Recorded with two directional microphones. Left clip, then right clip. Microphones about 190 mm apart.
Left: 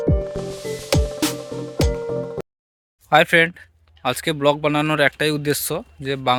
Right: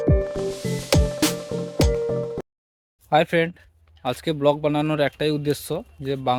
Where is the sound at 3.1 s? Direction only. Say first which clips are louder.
Left 5 dB; centre (ahead or behind).